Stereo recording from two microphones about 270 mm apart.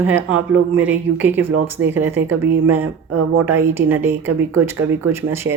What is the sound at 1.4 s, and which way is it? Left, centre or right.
Speech, right.